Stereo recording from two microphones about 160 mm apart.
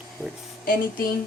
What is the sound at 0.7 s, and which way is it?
Speech, 65° left (ahead or behind).